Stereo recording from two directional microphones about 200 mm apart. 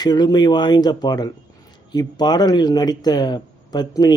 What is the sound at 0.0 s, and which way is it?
Speech, 20° left (ahead or behind).